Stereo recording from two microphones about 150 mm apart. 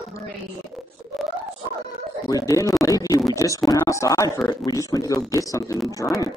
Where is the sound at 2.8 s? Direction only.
25° left (ahead or behind).